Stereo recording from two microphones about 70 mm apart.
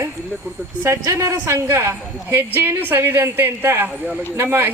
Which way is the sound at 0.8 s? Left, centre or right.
Right.